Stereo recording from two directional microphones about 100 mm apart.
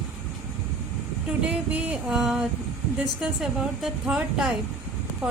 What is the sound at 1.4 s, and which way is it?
A woman's voice, 10° right (ahead or behind).